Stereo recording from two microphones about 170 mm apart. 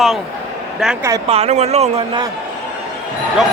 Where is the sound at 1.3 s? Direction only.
40° right (ahead or behind).